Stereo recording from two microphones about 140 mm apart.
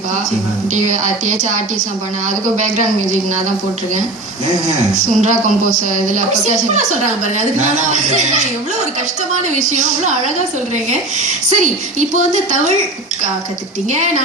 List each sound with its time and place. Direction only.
0.7 s a woman's voice: 60° right (ahead or behind)
4.9 s a woman's voice: 60° right (ahead or behind)
9.6 s a woman's voice: 60° right (ahead or behind)